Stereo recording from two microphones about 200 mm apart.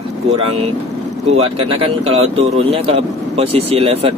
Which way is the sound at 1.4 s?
30° right (ahead or behind).